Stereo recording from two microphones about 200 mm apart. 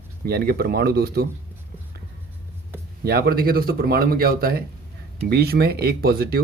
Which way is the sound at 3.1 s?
50° right (ahead or behind).